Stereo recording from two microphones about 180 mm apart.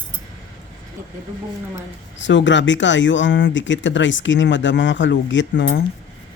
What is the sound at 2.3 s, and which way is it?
Speech, 90° left.